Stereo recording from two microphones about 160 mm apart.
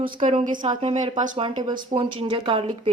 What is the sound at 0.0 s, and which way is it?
Speech, 55° right (ahead or behind).